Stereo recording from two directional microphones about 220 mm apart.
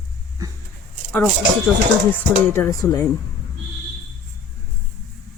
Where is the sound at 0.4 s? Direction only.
15° right (ahead or behind).